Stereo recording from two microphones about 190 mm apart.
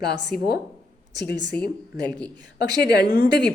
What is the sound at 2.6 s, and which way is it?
Speech, 60° left (ahead or behind).